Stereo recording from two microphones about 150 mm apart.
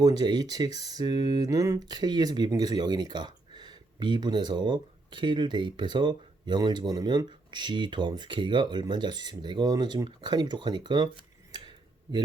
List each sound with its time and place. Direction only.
0.0 s speech: 25° right (ahead or behind)